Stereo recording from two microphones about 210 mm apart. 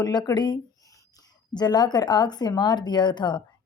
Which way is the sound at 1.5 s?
20° left (ahead or behind).